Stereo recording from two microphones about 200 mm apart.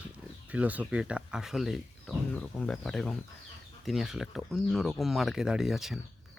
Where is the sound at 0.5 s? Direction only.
5° right (ahead or behind).